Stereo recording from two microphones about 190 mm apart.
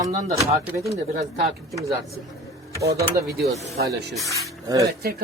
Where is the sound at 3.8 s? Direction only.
60° right (ahead or behind).